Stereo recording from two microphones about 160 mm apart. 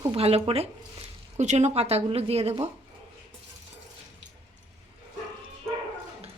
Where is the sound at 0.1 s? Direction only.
40° right (ahead or behind).